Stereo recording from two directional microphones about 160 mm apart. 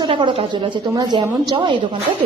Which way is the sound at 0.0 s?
30° right (ahead or behind).